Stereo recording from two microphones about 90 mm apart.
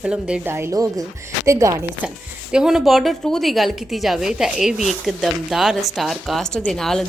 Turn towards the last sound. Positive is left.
turn(degrees=5)  # may be behind; listen again after turning